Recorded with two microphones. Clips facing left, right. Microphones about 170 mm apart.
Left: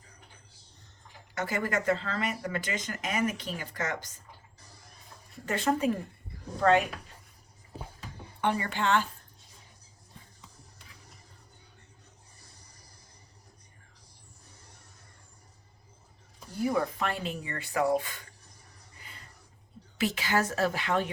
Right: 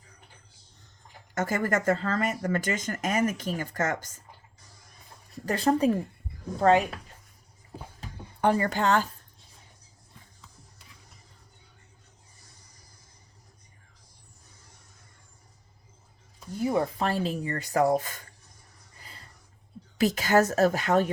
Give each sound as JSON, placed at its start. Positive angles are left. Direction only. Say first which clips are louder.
{"t": 1.4, "sound": "speech", "louder": "right 4 dB", "side_deg": -45}
{"t": 5.5, "sound": "speech", "louder": "right 4 dB", "side_deg": -35}
{"t": 8.4, "sound": "speech", "louder": "right 5 dB", "side_deg": -40}
{"t": 16.6, "sound": "speech", "louder": "right 2 dB", "side_deg": -25}
{"t": 20.0, "sound": "speech", "louder": "right 6 dB", "side_deg": -40}